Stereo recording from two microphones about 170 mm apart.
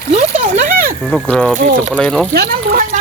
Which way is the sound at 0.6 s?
55° right (ahead or behind).